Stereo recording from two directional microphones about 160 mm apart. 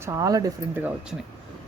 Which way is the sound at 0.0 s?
20° right (ahead or behind).